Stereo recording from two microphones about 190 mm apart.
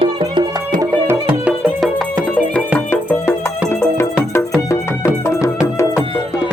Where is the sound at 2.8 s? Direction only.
10° left (ahead or behind).